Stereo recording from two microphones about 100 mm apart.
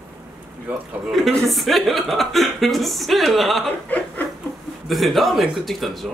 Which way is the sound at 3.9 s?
15° left (ahead or behind).